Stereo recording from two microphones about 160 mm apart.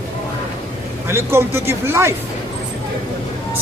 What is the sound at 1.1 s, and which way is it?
A man's voice, 15° right (ahead or behind).